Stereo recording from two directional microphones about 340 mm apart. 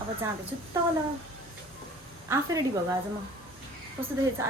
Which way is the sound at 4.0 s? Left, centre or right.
Centre.